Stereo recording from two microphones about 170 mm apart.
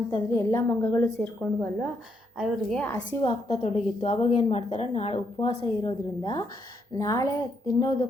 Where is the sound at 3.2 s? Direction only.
35° left (ahead or behind).